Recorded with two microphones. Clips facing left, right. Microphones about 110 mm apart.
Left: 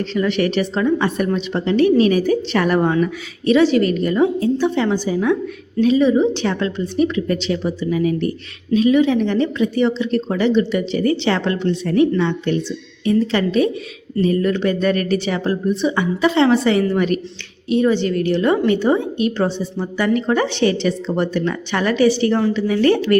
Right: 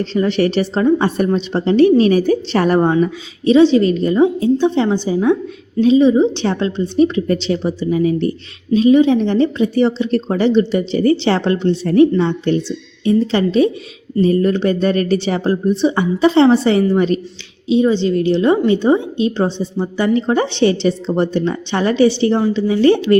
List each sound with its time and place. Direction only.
0.0 s a woman's voice: 35° right (ahead or behind)